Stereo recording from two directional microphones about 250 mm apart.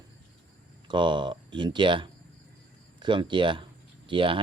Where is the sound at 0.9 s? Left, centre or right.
Centre.